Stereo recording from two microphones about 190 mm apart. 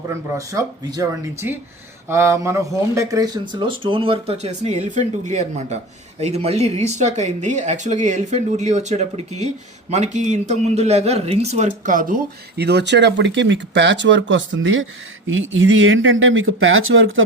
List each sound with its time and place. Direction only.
0.1 s speech: 15° right (ahead or behind); by 17.2 s 90° right